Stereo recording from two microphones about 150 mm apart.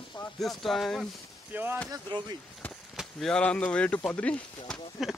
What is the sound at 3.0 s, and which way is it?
Speech, centre (ahead or behind).